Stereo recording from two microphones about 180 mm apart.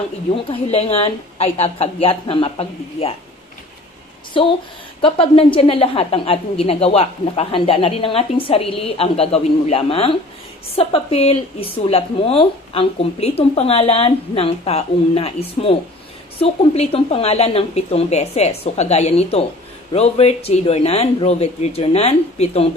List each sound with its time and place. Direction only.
0.5 s a woman's voice: 30° left (ahead or behind)
4.9 s a woman's voice: 30° left (ahead or behind)